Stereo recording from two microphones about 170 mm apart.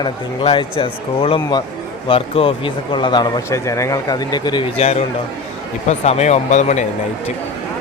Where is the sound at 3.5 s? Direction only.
15° left (ahead or behind); by 6.8 s 45° left (ahead or behind).